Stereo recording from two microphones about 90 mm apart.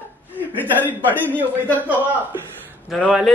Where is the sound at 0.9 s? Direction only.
20° right (ahead or behind).